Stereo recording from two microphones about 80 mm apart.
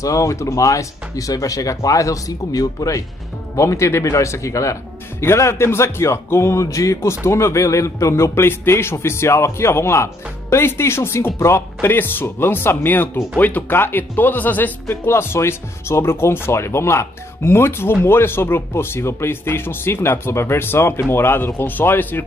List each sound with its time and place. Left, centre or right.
0.0 s speech: left